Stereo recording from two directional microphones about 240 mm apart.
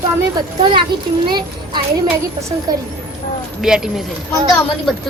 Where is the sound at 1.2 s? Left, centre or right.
Centre.